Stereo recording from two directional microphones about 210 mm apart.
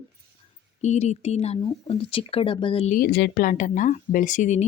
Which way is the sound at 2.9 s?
45° left (ahead or behind).